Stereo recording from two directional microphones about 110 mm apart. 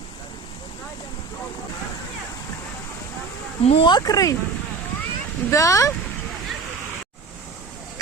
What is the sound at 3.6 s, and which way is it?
Speech, 60° left (ahead or behind).